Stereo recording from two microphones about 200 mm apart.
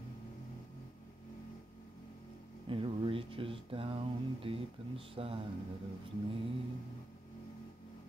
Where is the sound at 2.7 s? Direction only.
25° right (ahead or behind).